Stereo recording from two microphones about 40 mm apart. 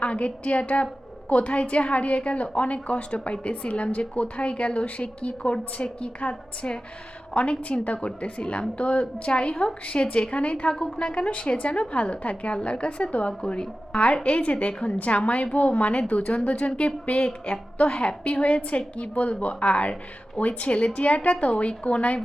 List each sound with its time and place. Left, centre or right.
0.0 s a woman's voice: left